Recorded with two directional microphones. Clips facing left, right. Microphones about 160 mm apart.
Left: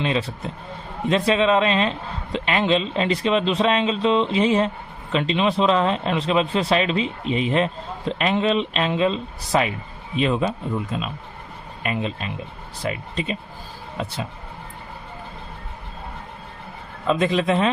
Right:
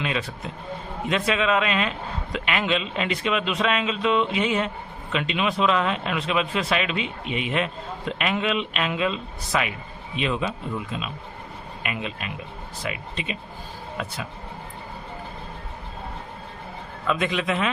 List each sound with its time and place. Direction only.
0.0 s speech: 30° left (ahead or behind)
17.1 s speech: 35° left (ahead or behind)